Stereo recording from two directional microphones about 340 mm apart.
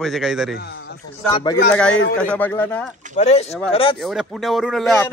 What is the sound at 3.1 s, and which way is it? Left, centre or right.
Speech, centre.